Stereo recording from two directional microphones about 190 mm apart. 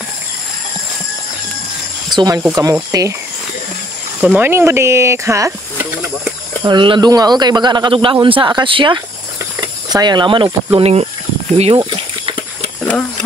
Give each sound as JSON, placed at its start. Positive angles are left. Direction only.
{"t": 2.0, "sound": "speech", "side_deg": -20}
{"t": 4.2, "sound": "speech", "side_deg": -10}
{"t": 6.6, "sound": "speech", "side_deg": -25}
{"t": 11.5, "sound": "snake", "side_deg": -30}